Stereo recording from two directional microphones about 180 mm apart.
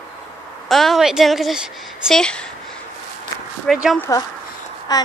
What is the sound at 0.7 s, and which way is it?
A woman's voice, centre (ahead or behind).